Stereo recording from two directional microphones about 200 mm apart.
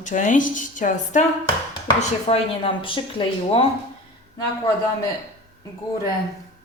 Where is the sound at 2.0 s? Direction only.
30° left (ahead or behind).